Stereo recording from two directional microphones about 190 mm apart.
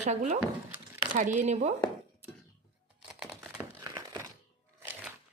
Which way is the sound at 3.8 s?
15° right (ahead or behind).